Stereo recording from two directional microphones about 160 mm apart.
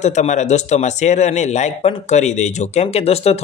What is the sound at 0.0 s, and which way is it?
A man's voice, 45° left (ahead or behind).